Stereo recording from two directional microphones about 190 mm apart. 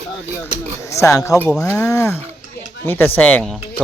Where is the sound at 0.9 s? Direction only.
15° left (ahead or behind).